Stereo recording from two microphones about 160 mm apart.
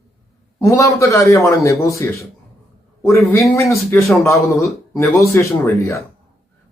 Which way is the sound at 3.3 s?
20° left (ahead or behind).